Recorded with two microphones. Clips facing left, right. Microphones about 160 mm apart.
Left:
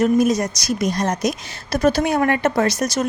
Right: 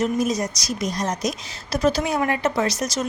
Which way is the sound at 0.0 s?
60° left (ahead or behind).